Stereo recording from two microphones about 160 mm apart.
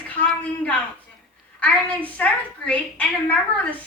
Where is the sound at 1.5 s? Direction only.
5° left (ahead or behind).